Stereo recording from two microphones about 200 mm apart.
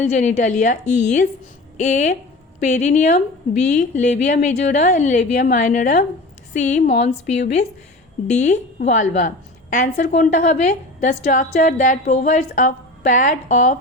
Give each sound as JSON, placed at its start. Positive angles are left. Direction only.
{"t": 0.0, "sound": "a woman's voice", "side_deg": 35}